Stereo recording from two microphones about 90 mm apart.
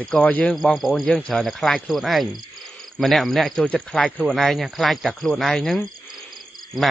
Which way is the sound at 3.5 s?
15° left (ahead or behind).